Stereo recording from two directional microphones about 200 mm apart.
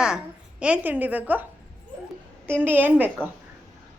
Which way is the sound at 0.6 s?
5° right (ahead or behind).